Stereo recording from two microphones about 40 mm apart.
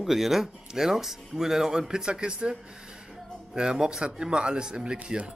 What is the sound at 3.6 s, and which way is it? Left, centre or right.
Speech, right.